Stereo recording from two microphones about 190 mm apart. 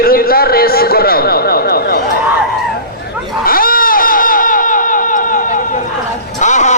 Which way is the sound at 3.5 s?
50° left (ahead or behind).